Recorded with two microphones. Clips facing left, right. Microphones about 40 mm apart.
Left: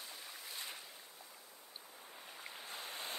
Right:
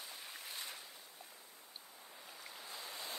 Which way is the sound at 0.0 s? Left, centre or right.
Centre.